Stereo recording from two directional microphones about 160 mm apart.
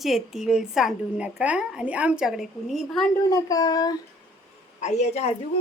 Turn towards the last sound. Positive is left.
turn(degrees=45)  # may be behind; listen again after turning